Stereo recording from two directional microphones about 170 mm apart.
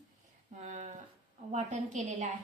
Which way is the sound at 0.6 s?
45° right (ahead or behind).